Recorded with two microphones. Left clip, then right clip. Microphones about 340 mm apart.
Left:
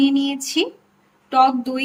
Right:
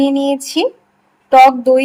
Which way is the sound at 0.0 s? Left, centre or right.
Centre.